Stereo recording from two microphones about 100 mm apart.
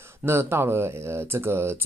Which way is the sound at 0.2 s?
25° right (ahead or behind).